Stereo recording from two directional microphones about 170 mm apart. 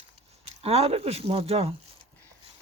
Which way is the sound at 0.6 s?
40° right (ahead or behind).